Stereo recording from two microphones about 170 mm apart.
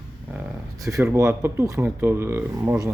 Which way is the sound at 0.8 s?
15° right (ahead or behind).